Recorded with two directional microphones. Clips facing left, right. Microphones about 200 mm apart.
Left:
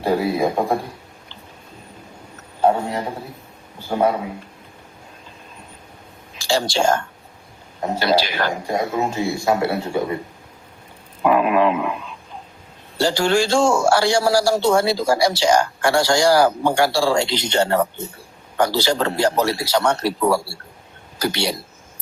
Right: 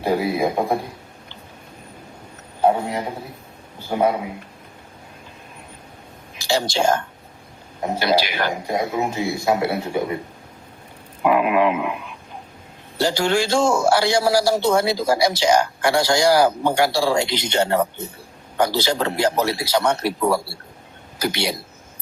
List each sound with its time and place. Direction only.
0.0 s a man's voice: 15° right (ahead or behind)
2.6 s a sound: 15° right (ahead or behind)
3.8 s a man's voice: 15° right (ahead or behind)
6.3 s a man's voice: 15° right (ahead or behind)
11.2 s a man's voice: 15° right (ahead or behind)